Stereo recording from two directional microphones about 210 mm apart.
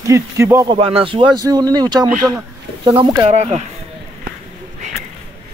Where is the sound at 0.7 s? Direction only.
25° right (ahead or behind).